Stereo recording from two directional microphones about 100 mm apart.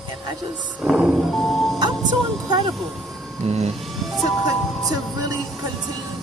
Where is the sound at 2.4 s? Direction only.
45° right (ahead or behind).